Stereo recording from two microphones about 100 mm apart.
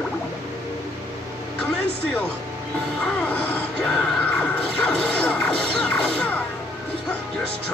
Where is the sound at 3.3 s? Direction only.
15° left (ahead or behind).